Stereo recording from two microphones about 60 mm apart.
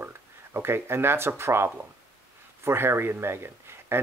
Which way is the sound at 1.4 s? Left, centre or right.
Right.